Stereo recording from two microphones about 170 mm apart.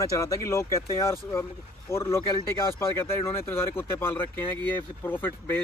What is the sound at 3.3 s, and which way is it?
Speech, 15° left (ahead or behind).